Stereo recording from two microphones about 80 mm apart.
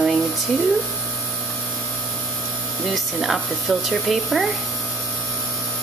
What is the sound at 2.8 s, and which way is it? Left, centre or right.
Speech, centre.